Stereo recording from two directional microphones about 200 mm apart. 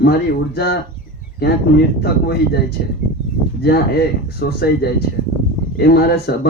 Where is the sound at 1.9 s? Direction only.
50° left (ahead or behind).